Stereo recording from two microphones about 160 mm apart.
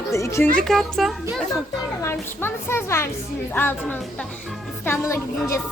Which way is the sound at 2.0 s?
15° left (ahead or behind).